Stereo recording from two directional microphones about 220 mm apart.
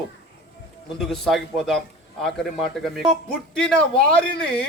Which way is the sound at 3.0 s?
5° left (ahead or behind).